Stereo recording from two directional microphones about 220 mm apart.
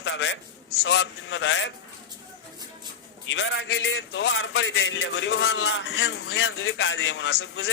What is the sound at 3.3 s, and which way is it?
A man's voice, 60° left (ahead or behind).